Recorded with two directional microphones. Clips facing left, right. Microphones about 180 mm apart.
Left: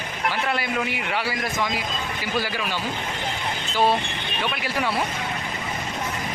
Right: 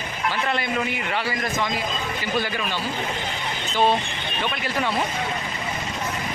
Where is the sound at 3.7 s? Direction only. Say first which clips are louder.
Right 1 dB; 5° left (ahead or behind).